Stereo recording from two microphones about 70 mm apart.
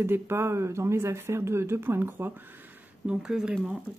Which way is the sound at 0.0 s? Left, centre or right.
Right.